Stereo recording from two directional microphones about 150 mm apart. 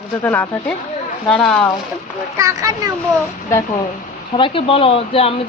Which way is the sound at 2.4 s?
20° right (ahead or behind).